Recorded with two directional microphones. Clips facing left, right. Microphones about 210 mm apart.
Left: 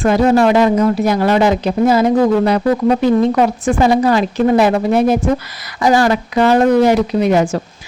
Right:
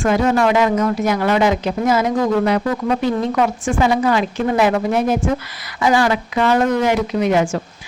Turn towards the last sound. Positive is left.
turn(degrees=35)  # may be behind; listen again after turning